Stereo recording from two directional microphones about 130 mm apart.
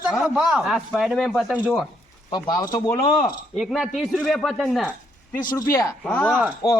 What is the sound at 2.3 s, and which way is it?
Speech, 30° left (ahead or behind).